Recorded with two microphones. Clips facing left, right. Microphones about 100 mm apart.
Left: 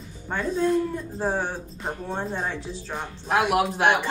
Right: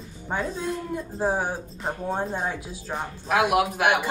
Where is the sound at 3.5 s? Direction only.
25° left (ahead or behind).